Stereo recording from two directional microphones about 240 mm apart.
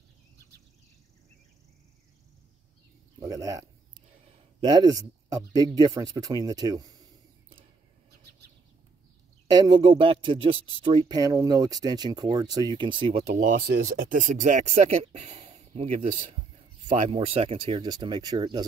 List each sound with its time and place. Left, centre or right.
3.2 s speech: centre
9.7 s speech: right